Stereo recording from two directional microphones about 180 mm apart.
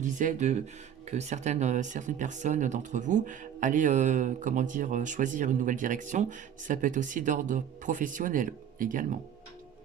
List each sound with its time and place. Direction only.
0.0 s speech: 45° right (ahead or behind)